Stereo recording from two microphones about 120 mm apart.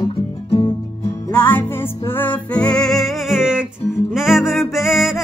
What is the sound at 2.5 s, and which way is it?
Music, 5° left (ahead or behind).